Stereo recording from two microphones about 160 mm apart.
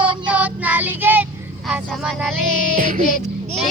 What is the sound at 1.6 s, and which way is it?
Speech, centre (ahead or behind).